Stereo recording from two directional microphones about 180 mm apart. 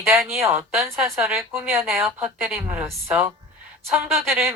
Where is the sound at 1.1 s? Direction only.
Centre (ahead or behind).